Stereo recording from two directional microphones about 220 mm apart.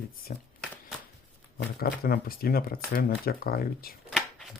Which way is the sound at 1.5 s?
45° left (ahead or behind).